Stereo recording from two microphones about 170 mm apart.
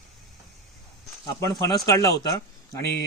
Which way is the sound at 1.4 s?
20° left (ahead or behind).